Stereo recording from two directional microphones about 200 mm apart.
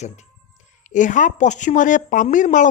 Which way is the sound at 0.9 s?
40° left (ahead or behind).